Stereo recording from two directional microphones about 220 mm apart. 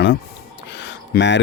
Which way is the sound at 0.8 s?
55° left (ahead or behind).